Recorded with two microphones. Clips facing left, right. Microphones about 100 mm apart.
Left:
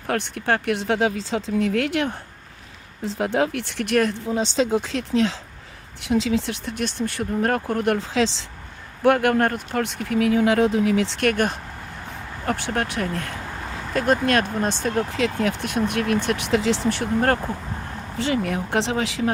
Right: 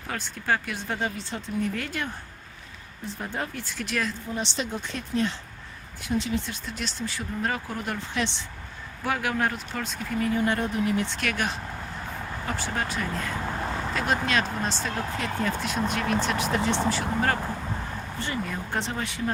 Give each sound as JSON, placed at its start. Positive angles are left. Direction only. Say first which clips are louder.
{"t": 0.1, "sound": "speech", "louder": "left 5 dB", "side_deg": 65}
{"t": 3.0, "sound": "speech", "louder": "left 11 dB", "side_deg": 90}
{"t": 4.7, "sound": "speech", "louder": "left 8 dB", "side_deg": 90}
{"t": 9.0, "sound": "speech", "louder": "left 9 dB", "side_deg": 60}
{"t": 11.2, "sound": "speech", "louder": "left 8 dB", "side_deg": 50}
{"t": 12.5, "sound": "speech", "louder": "left 6 dB", "side_deg": 65}
{"t": 13.9, "sound": "speech", "louder": "left 7 dB", "side_deg": 50}
{"t": 15.1, "sound": "speech", "louder": "left 5 dB", "side_deg": 85}
{"t": 18.2, "sound": "speech", "louder": "left 9 dB", "side_deg": 80}